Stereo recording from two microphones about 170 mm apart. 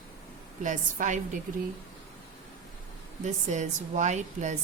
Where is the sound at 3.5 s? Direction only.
45° right (ahead or behind).